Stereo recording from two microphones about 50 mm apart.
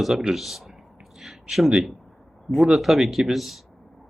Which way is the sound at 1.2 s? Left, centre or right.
Centre.